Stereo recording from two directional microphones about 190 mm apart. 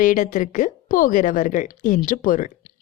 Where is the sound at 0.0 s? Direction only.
45° left (ahead or behind).